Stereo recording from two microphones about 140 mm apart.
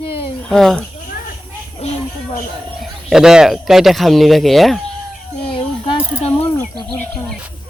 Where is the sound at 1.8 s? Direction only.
45° left (ahead or behind).